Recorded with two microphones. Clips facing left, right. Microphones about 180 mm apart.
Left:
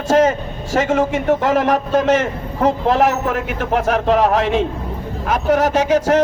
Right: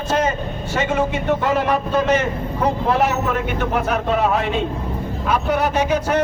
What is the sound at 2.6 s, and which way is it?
Speech, 90° left.